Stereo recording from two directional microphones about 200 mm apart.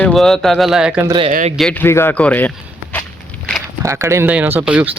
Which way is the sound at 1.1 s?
25° right (ahead or behind).